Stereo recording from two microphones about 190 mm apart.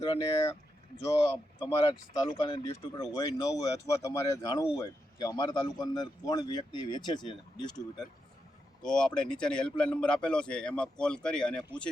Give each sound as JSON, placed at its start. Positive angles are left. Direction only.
{"t": 0.0, "sound": "speech", "side_deg": 20}
{"t": 1.5, "sound": "speech", "side_deg": 25}
{"t": 8.8, "sound": "speech", "side_deg": 5}